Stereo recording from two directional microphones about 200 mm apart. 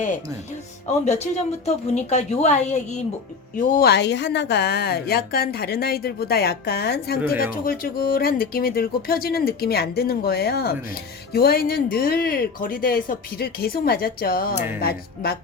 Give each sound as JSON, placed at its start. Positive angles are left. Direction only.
{"t": 1.0, "sound": "a woman's voice", "side_deg": 35}